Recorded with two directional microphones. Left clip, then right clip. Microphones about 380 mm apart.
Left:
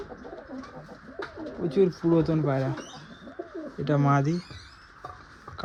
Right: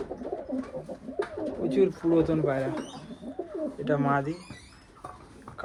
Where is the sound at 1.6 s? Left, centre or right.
Centre.